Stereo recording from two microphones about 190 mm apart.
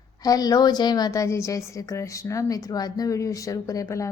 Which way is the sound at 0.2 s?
20° left (ahead or behind).